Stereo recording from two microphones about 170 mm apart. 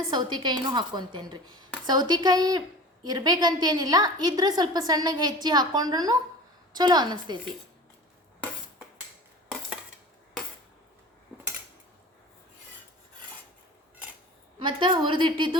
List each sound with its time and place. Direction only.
0.1 s a woman's voice: 25° right (ahead or behind)
14.6 s a woman's voice: 30° right (ahead or behind)